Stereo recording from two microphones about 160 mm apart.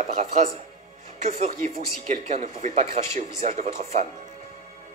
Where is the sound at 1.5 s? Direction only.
65° right (ahead or behind).